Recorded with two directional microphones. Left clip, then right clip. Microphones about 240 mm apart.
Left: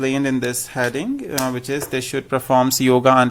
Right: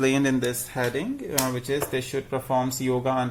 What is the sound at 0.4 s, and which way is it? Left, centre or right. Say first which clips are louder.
Speech: left 5 dB; left.